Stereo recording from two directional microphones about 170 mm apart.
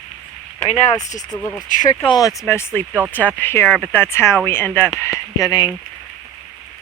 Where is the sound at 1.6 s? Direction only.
50° left (ahead or behind).